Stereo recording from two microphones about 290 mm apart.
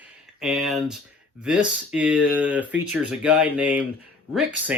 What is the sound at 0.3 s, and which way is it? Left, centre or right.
Speech, centre.